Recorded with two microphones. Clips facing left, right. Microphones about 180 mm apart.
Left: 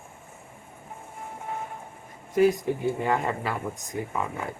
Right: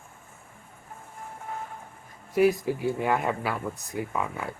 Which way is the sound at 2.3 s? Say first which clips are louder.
Left 1 dB; 5° right (ahead or behind).